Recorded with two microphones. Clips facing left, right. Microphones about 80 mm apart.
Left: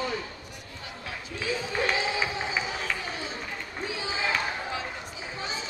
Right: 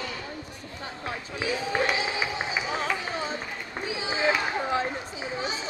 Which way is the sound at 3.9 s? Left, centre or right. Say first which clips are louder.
Right 5 dB; right.